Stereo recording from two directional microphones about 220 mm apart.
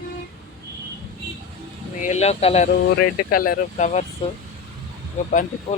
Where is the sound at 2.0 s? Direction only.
30° left (ahead or behind).